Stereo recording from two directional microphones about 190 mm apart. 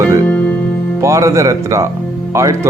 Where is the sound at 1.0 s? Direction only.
15° right (ahead or behind).